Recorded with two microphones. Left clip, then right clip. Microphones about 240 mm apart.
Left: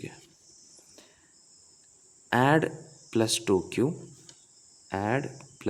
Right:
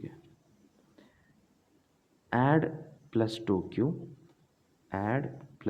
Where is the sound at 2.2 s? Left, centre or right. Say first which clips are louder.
Left 4 dB; left.